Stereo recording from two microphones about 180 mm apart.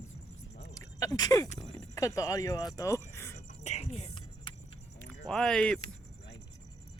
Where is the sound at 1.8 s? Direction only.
20° left (ahead or behind).